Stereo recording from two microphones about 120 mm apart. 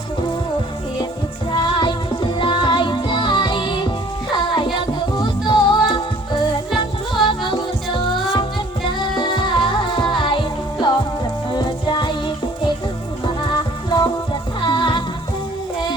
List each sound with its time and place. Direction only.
2.4 s music: 40° left (ahead or behind)
9.2 s music: 40° left (ahead or behind)
13.2 s music: 35° left (ahead or behind)